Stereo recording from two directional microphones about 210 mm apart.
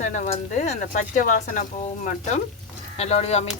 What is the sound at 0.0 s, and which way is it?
Speech, 35° left (ahead or behind).